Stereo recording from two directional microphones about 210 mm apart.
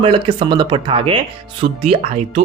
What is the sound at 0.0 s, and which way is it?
A man's voice, 25° right (ahead or behind).